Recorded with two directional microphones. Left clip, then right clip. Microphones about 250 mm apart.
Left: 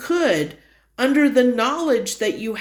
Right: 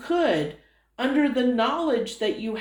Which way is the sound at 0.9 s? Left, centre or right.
Left.